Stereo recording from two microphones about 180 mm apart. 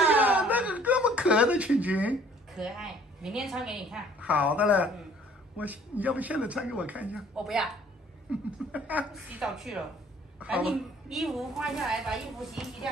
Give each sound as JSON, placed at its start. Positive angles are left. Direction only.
{"t": 0.0, "sound": "a man's voice", "side_deg": -10}